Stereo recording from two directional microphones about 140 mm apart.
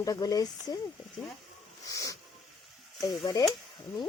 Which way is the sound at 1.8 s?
25° left (ahead or behind).